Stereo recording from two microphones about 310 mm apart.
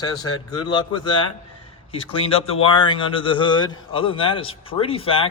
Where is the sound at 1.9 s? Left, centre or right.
Centre.